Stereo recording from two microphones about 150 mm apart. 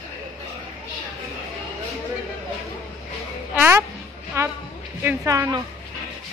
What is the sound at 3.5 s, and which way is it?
A child's voice, 10° right (ahead or behind).